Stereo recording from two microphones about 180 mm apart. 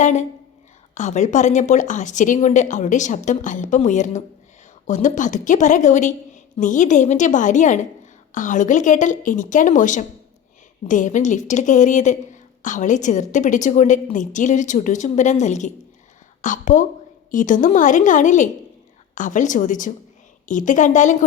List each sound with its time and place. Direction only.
0.0 s a woman's voice: 40° left (ahead or behind)